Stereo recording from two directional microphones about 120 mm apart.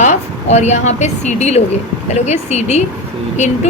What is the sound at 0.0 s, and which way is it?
A woman's voice, 70° left (ahead or behind).